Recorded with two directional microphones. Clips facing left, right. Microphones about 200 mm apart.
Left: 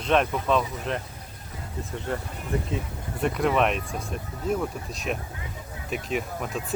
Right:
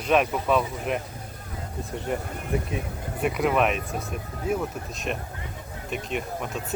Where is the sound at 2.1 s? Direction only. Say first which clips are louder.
Right 2 dB; 15° right (ahead or behind).